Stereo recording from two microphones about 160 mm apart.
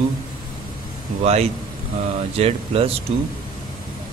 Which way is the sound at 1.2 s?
40° right (ahead or behind).